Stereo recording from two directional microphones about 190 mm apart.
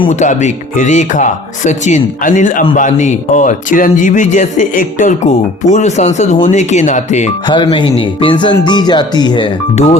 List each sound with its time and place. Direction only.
0.1 s speech: 40° left (ahead or behind)
7.4 s speech: 25° left (ahead or behind)